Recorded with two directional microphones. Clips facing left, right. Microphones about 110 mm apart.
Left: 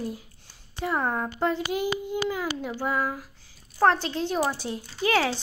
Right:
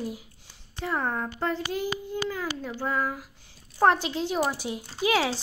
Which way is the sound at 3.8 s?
10° right (ahead or behind).